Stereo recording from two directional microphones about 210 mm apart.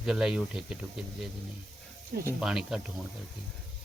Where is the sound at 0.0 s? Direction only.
5° right (ahead or behind).